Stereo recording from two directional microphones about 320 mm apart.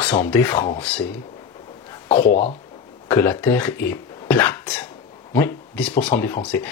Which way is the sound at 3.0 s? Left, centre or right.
Centre.